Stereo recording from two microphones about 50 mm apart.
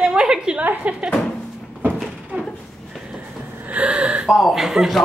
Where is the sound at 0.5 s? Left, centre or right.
Right.